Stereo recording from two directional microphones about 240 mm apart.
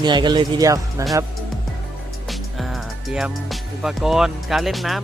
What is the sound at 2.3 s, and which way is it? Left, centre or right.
Music, centre.